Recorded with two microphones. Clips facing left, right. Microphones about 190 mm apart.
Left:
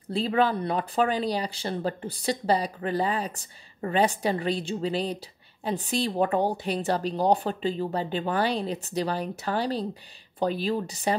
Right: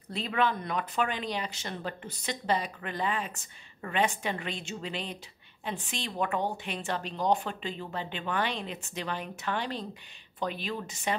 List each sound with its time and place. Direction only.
0.1 s speech: 30° left (ahead or behind)